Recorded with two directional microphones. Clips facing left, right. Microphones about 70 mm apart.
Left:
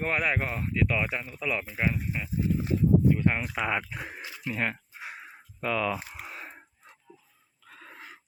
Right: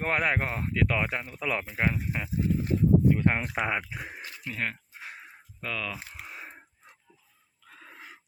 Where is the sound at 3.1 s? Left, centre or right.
Right.